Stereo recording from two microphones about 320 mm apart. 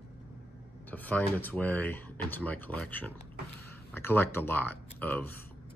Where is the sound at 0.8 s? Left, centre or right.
Centre.